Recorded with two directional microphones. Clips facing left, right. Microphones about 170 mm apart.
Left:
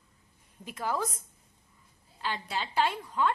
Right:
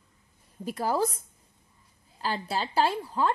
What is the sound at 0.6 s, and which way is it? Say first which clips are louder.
Speech: right 5 dB; 35° right (ahead or behind).